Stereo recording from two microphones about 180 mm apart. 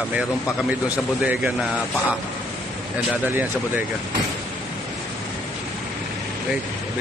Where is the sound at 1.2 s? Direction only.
5° right (ahead or behind).